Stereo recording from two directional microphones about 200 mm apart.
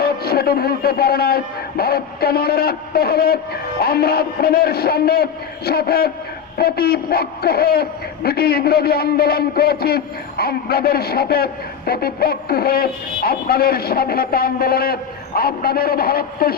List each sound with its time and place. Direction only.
0.0 s a man's voice: 50° left (ahead or behind)